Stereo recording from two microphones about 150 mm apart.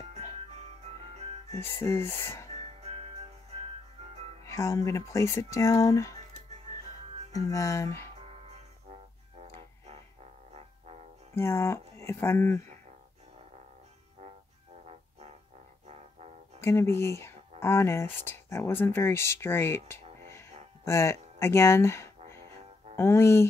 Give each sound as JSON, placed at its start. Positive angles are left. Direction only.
{"t": 0.5, "sound": "music", "side_deg": -45}
{"t": 1.5, "sound": "speech", "side_deg": 15}
{"t": 2.5, "sound": "music", "side_deg": -45}
{"t": 4.5, "sound": "speech", "side_deg": 20}
{"t": 7.3, "sound": "speech", "side_deg": 20}
{"t": 8.3, "sound": "music", "side_deg": -45}
{"t": 11.3, "sound": "speech", "side_deg": 20}
{"t": 16.6, "sound": "speech", "side_deg": 15}